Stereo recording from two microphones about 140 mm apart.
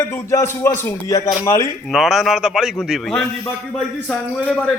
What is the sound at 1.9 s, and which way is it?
A man's voice, centre (ahead or behind).